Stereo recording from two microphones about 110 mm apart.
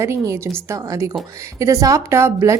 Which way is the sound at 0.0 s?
25° right (ahead or behind).